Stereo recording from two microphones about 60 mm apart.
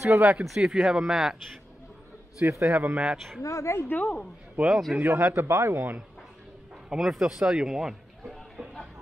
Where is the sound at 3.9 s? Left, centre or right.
Left.